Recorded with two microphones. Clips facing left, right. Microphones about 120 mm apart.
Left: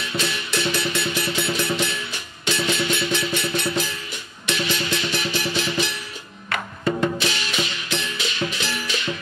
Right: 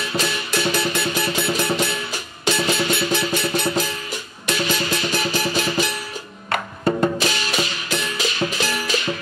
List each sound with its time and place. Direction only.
0.1 s music: 40° right (ahead or behind)